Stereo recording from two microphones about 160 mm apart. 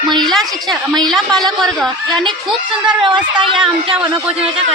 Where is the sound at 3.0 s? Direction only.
30° right (ahead or behind).